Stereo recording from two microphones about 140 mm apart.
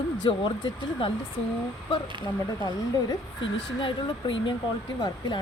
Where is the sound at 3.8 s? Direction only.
35° left (ahead or behind).